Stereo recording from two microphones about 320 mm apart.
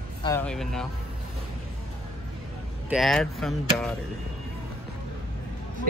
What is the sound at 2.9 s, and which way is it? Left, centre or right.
Speech, centre.